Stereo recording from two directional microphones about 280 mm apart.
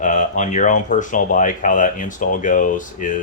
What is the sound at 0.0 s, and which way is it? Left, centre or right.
Speech, left.